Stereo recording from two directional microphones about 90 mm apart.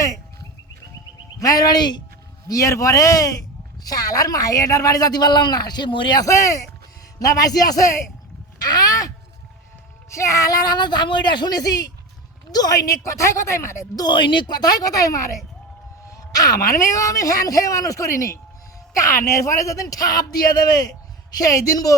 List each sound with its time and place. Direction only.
1.4 s a woman's voice: 45° left (ahead or behind)
2.5 s a man's voice: 35° left (ahead or behind); by 6.1 s 65° left (ahead or behind)
6.2 s a man's voice: 35° left (ahead or behind)
8.6 s a sound: 45° left (ahead or behind)
10.2 s a woman's voice: 35° left (ahead or behind)
14.0 s a woman's voice: 60° left (ahead or behind); by 21.9 s 40° left (ahead or behind)